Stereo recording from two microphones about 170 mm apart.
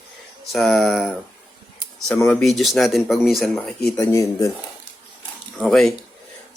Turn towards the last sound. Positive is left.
turn(degrees=0)  # may be behind; listen again after turning